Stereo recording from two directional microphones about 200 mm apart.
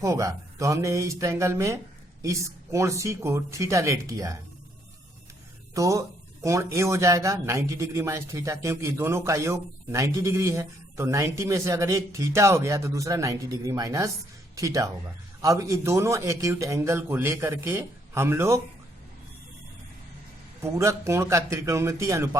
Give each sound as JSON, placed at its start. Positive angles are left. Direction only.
{"t": 0.0, "sound": "speech", "side_deg": -15}
{"t": 5.7, "sound": "speech", "side_deg": -15}
{"t": 20.6, "sound": "speech", "side_deg": -15}